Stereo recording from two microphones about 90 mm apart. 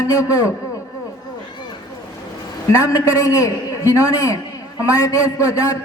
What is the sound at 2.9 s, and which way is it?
A man's voice, 40° left (ahead or behind).